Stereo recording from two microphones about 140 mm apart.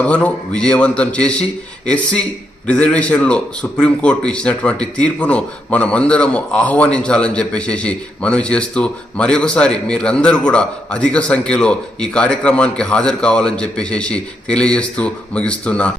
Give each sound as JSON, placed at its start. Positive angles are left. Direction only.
{"t": 0.0, "sound": "a man's voice", "side_deg": 10}
{"t": 2.6, "sound": "a man's voice", "side_deg": 10}